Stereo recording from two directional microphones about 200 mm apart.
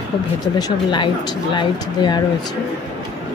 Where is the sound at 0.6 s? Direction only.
20° left (ahead or behind).